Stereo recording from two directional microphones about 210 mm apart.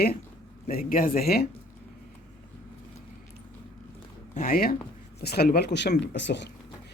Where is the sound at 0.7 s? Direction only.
40° left (ahead or behind).